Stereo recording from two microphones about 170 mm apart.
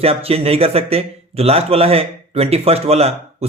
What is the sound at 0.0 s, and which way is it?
Speech, 35° right (ahead or behind).